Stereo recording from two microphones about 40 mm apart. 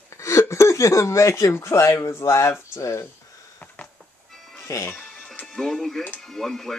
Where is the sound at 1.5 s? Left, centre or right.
Left.